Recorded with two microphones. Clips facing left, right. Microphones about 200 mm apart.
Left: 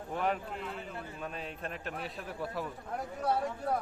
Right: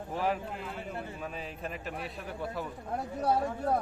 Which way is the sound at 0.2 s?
5° right (ahead or behind).